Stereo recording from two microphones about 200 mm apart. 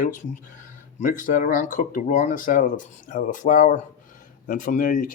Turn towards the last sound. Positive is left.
turn(degrees=45)  # may be behind; listen again after turning